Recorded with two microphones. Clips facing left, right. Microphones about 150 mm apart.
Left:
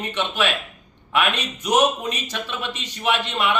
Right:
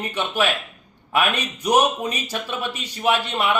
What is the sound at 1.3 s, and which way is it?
Speech, 10° right (ahead or behind).